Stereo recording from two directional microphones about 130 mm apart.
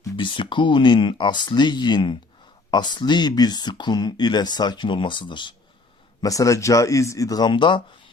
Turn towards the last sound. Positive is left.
turn(degrees=40)  # may be behind; listen again after turning